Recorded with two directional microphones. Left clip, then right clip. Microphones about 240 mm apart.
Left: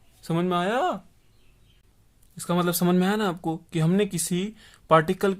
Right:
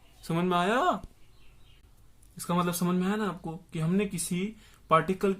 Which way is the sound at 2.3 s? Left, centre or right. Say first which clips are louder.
Left 4 dB; left.